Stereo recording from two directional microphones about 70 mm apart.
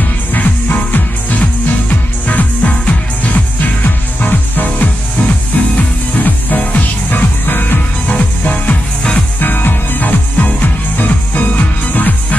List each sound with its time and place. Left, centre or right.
0.3 s music: left
9.4 s music: left